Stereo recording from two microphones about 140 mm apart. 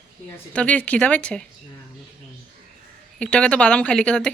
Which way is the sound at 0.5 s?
10° left (ahead or behind).